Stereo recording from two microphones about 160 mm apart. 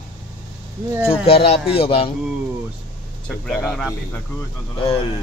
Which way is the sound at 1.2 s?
40° left (ahead or behind).